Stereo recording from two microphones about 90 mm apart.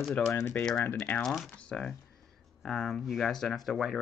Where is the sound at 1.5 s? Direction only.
10° left (ahead or behind).